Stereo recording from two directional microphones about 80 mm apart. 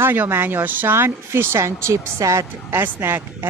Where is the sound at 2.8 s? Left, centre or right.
Right.